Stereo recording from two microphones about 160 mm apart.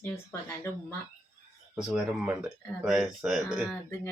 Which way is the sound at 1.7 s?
5° right (ahead or behind).